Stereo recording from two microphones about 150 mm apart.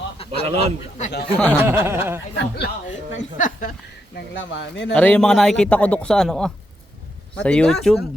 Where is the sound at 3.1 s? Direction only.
60° left (ahead or behind).